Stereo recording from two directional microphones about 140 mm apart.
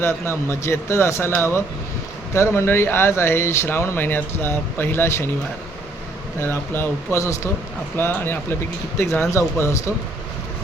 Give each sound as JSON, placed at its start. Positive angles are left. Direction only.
{"t": 0.0, "sound": "speech", "side_deg": 20}
{"t": 6.4, "sound": "speech", "side_deg": 15}